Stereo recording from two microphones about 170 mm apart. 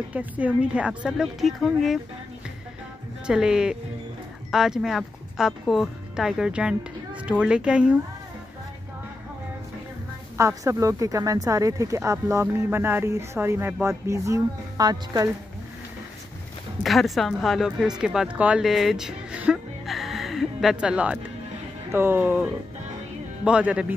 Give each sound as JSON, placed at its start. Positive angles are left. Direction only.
{"t": 0.1, "sound": "speech", "side_deg": -10}
{"t": 3.3, "sound": "a woman's voice", "side_deg": -5}
{"t": 10.3, "sound": "speech", "side_deg": -15}
{"t": 16.8, "sound": "speech", "side_deg": 0}